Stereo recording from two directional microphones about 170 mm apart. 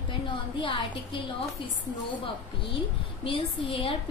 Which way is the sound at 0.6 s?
30° left (ahead or behind).